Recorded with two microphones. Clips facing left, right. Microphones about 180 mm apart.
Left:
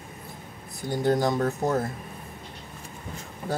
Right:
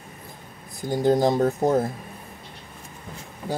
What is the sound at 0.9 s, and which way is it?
Speech, 30° right (ahead or behind).